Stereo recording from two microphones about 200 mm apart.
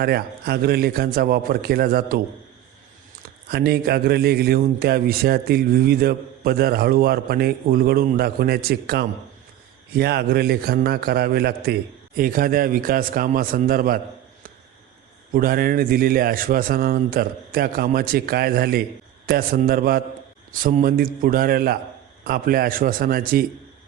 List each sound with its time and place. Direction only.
0.0 s a man's voice: 50° right (ahead or behind)
3.2 s a man's voice: 50° right (ahead or behind)
15.3 s a man's voice: 45° right (ahead or behind)